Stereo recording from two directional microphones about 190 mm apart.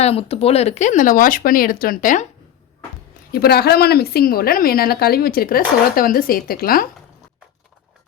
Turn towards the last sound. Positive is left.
turn(degrees=50)  # may be behind; listen again after turning